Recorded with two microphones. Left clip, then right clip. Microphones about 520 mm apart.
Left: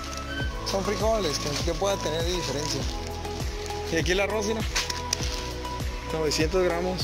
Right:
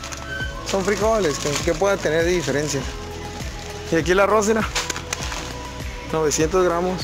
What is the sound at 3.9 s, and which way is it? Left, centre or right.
Speech, right.